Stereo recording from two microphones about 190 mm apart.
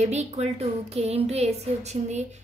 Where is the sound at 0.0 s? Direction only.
35° right (ahead or behind).